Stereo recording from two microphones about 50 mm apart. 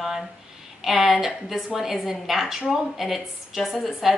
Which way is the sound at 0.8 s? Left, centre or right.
Centre.